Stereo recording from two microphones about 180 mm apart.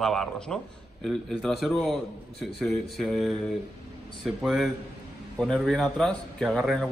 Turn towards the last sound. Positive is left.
turn(degrees=0)  # may be behind; listen again after turning